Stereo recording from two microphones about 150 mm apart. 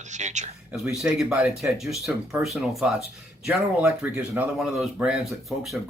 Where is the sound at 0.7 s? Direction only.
Centre (ahead or behind).